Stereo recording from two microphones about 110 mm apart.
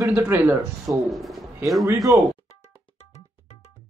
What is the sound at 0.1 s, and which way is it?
Speech, 15° right (ahead or behind).